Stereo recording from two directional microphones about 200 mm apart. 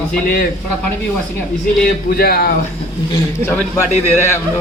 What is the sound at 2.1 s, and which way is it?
Speech, 50° left (ahead or behind).